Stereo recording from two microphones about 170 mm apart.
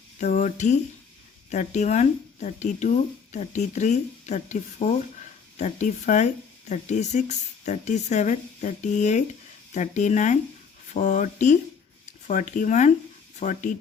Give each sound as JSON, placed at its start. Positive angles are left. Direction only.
{"t": 0.2, "sound": "speech", "side_deg": 45}